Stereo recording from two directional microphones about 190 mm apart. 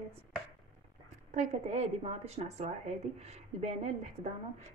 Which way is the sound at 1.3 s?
35° right (ahead or behind).